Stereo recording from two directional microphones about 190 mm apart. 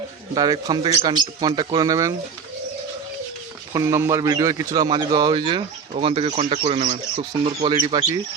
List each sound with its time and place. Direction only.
0.3 s speech: 20° right (ahead or behind)
3.7 s speech: 15° right (ahead or behind)